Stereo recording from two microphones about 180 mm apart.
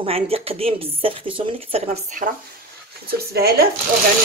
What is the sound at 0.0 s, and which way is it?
Speech, 30° right (ahead or behind).